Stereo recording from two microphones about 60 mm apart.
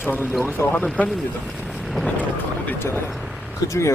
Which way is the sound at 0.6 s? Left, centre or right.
Left.